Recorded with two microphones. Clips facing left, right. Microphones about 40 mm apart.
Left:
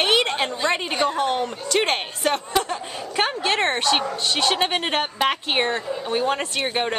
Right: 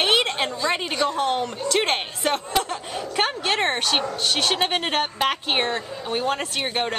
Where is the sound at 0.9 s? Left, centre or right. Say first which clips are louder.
Left 1 dB; left.